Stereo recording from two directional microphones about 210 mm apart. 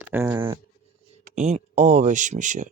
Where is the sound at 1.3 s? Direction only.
35° right (ahead or behind).